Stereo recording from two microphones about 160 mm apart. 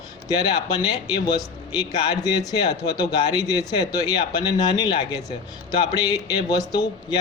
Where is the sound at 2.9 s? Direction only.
25° left (ahead or behind).